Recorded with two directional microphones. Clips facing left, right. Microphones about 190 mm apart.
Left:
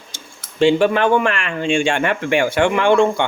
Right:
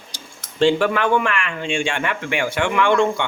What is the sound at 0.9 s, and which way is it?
Speech, 30° left (ahead or behind).